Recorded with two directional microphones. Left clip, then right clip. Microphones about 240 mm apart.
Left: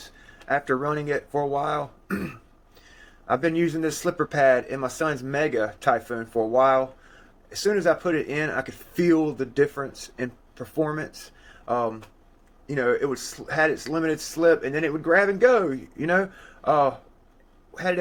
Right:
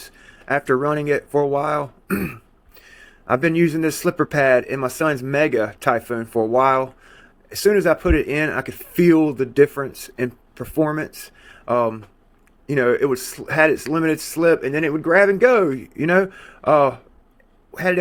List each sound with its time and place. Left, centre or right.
0.0 s a man's voice: right